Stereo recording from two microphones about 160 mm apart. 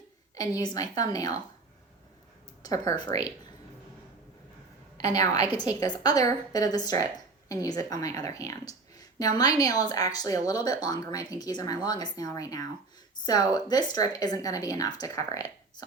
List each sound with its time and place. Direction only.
0.3 s a woman's voice: 25° left (ahead or behind)
2.6 s a woman's voice: 25° left (ahead or behind)
4.9 s a woman's voice: 20° left (ahead or behind)